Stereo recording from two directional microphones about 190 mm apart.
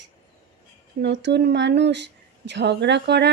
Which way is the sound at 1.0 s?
70° right (ahead or behind).